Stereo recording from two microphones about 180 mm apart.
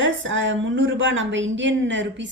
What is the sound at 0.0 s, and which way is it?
Speech, 90° right.